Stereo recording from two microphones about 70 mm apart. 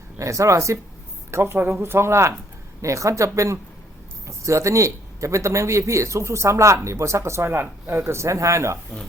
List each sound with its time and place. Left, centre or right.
0.2 s a man's voice: right
1.3 s a man's voice: right